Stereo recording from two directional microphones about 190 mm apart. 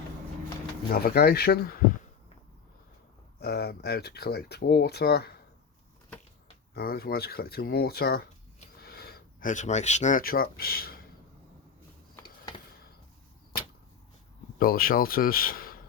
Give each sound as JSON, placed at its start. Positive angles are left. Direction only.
{"t": 0.9, "sound": "speech", "side_deg": 55}
{"t": 3.4, "sound": "speech", "side_deg": 55}
{"t": 6.7, "sound": "speech", "side_deg": 55}
{"t": 14.6, "sound": "speech", "side_deg": 50}